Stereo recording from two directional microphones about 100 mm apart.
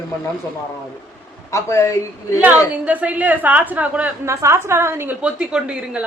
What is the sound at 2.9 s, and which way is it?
Speech, 15° right (ahead or behind).